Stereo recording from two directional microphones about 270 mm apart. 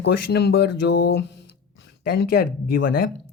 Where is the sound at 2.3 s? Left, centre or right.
Left.